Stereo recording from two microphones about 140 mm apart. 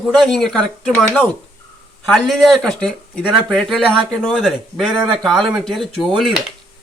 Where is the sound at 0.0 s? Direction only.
Centre (ahead or behind).